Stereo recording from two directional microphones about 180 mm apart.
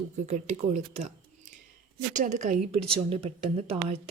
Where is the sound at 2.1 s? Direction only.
40° right (ahead or behind).